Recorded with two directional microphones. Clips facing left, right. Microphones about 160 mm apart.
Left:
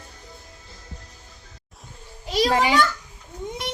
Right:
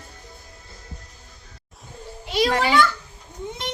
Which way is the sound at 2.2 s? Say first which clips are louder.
Even; 40° left (ahead or behind).